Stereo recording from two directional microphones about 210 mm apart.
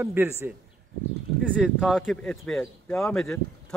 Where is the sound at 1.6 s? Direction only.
Centre (ahead or behind).